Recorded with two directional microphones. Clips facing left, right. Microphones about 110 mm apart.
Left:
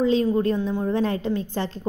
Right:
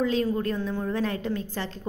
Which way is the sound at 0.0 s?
25° left (ahead or behind).